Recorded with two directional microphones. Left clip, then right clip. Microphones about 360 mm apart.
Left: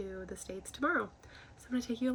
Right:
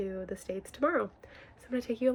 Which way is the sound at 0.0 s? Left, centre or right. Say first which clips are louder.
Right 6 dB; right.